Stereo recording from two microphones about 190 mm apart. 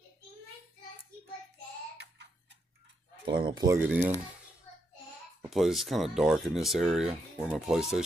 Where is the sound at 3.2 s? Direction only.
25° right (ahead or behind); by 4.1 s 5° right (ahead or behind).